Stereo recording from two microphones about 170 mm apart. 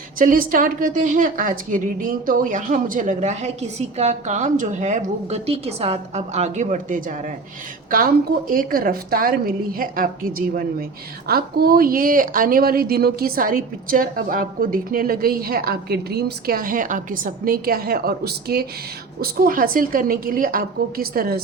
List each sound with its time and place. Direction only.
0.2 s a woman's voice: 55° right (ahead or behind)